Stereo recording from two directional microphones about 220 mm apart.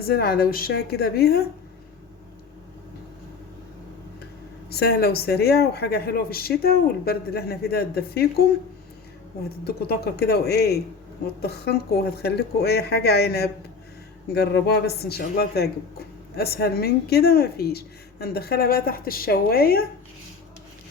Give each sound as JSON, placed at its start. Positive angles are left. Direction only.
{"t": 0.0, "sound": "speech", "side_deg": 45}
{"t": 4.7, "sound": "speech", "side_deg": 45}
{"t": 9.6, "sound": "speech", "side_deg": 45}